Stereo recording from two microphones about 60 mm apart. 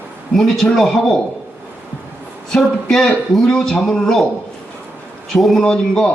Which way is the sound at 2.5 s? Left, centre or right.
Centre.